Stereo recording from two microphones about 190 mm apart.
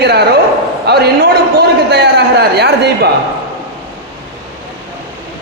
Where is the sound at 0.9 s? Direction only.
60° right (ahead or behind).